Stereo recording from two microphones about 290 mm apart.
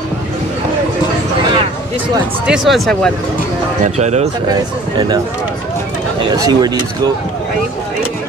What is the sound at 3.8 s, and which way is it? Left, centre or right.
Speech, right.